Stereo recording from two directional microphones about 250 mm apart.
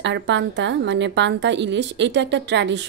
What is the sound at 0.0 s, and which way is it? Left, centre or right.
A woman's voice, right.